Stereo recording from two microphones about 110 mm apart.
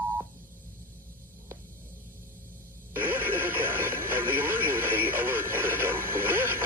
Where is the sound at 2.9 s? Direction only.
20° right (ahead or behind).